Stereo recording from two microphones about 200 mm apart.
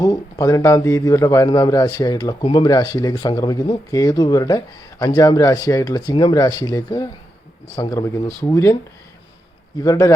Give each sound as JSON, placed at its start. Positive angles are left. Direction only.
{"t": 0.0, "sound": "a man's voice", "side_deg": 20}
{"t": 9.7, "sound": "a man's voice", "side_deg": 15}